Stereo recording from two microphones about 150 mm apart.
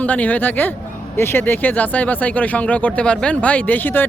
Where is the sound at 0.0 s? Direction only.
10° left (ahead or behind).